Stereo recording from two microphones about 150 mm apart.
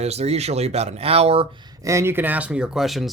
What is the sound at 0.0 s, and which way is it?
Speech, 45° right (ahead or behind).